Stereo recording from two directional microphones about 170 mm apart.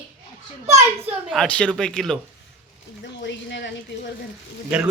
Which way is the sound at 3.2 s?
90° left.